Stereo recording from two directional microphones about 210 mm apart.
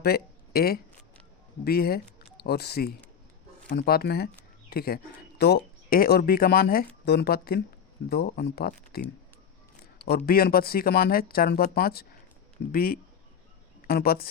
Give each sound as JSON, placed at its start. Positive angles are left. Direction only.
{"t": 0.0, "sound": "a sound", "side_deg": 50}
{"t": 1.6, "sound": "speech", "side_deg": 45}
{"t": 10.2, "sound": "speech", "side_deg": 45}